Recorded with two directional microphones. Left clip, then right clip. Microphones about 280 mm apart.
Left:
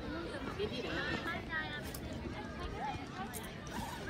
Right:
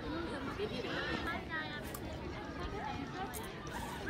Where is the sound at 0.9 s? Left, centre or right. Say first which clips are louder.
Even; right.